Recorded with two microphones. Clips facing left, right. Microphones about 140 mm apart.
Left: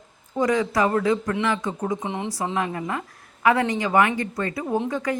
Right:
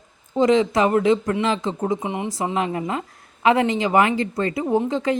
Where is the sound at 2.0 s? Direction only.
10° right (ahead or behind).